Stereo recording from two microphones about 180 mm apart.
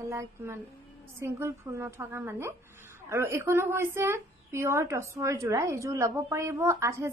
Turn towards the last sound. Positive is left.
turn(degrees=-15)  # may be behind; listen again after turning